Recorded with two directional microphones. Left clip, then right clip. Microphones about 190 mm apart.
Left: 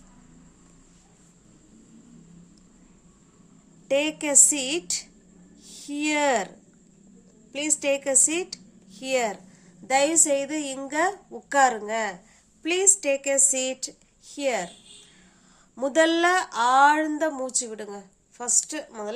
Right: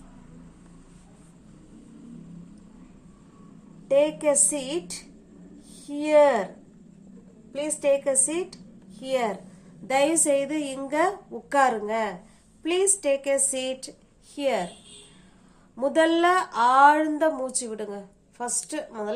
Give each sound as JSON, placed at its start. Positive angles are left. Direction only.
{"t": 3.8, "sound": "a woman's voice", "side_deg": 40}
{"t": 7.5, "sound": "a woman's voice", "side_deg": 45}
{"t": 9.8, "sound": "a woman's voice", "side_deg": 25}
{"t": 15.7, "sound": "a woman's voice", "side_deg": 30}